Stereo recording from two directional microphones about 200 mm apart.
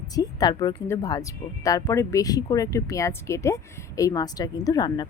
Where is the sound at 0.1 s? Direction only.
20° left (ahead or behind).